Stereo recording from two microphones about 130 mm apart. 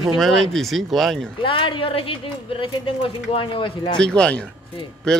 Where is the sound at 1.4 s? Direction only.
40° left (ahead or behind).